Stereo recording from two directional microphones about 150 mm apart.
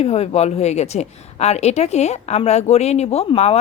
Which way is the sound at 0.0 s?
45° left (ahead or behind).